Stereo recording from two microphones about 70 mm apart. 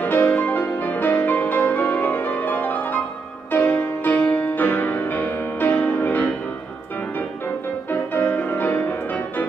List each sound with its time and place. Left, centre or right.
0.0 s music: left
7.9 s music: left